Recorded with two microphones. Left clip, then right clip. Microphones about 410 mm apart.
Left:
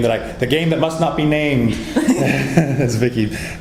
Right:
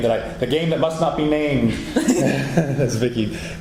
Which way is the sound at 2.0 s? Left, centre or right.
Right.